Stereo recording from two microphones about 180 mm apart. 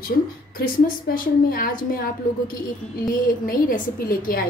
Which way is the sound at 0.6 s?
55° left (ahead or behind).